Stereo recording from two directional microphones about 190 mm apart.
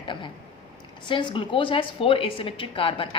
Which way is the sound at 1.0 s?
25° left (ahead or behind).